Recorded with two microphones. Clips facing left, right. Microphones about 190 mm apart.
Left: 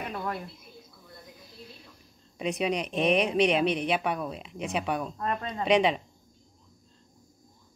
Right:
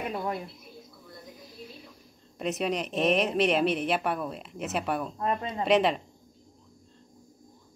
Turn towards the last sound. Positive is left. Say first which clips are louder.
# even
turn(degrees=0)  # may be behind; listen again after turning